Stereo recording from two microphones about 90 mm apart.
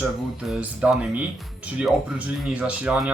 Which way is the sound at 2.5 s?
15° right (ahead or behind).